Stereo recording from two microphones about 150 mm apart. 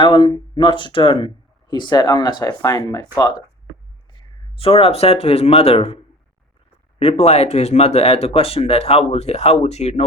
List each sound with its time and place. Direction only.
0.0 s speech: 35° left (ahead or behind)
7.0 s speech: 40° left (ahead or behind)